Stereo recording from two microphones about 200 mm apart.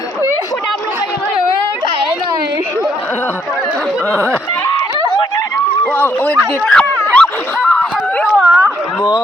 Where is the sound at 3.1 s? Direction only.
5° left (ahead or behind).